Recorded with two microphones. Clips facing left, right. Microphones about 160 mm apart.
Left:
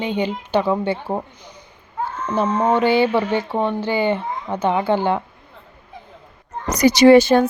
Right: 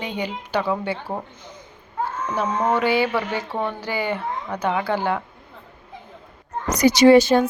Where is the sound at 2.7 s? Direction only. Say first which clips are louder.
Left 4 dB; 25° left (ahead or behind).